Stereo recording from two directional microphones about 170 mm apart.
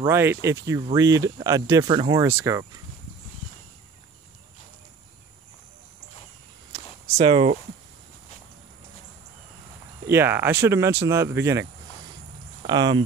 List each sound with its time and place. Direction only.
0.0 s speech: 15° right (ahead or behind)
2.2 s speech: 15° right (ahead or behind)
7.2 s speech: 35° right (ahead or behind)
10.0 s speech: 15° right (ahead or behind)
12.6 s speech: 25° right (ahead or behind)